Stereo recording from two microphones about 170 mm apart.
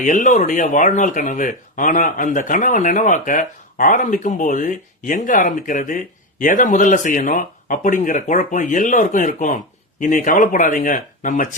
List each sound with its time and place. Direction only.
0.0 s speech: 50° left (ahead or behind)